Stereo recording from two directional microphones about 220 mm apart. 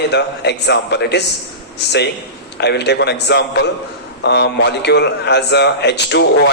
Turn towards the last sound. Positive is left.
turn(degrees=50)  # may be behind; listen again after turning